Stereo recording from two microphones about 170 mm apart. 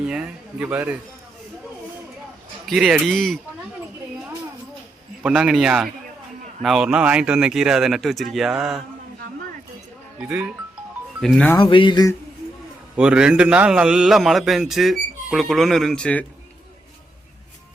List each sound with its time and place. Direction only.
0.0 s a man's voice: 5° right (ahead or behind)
2.6 s a man's voice: centre (ahead or behind)
5.2 s a man's voice: 5° right (ahead or behind)
10.2 s a man's voice: 5° right (ahead or behind)
11.5 s speech: 30° left (ahead or behind)
13.0 s a man's voice: 5° right (ahead or behind)